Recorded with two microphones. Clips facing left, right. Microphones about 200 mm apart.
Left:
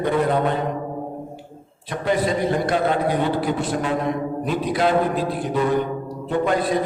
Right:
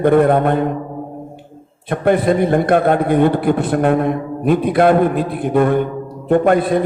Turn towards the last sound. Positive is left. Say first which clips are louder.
# right 7 dB
turn(degrees=-55)  # may be behind; listen again after turning